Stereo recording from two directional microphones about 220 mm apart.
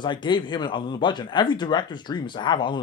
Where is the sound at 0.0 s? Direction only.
20° left (ahead or behind).